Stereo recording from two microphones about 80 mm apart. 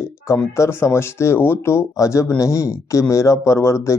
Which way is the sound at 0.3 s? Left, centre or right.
Left.